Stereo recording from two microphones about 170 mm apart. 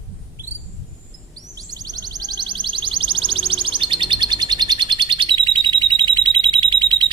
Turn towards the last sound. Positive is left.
turn(degrees=-30)  # may be behind; listen again after turning